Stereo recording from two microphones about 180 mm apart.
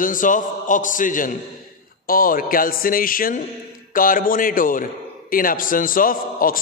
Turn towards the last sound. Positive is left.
turn(degrees=50)  # may be behind; listen again after turning